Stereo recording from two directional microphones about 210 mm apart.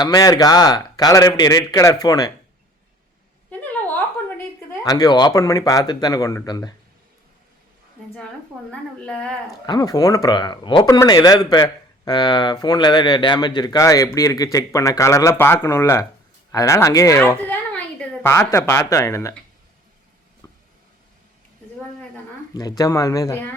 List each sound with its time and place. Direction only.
0.0 s speech: 15° left (ahead or behind)
3.5 s a sound: 10° left (ahead or behind)
4.8 s speech: 20° left (ahead or behind)
8.7 s a woman's voice: 5° left (ahead or behind)
9.6 s a woman's voice: 20° left (ahead or behind)
22.5 s speech: 20° left (ahead or behind)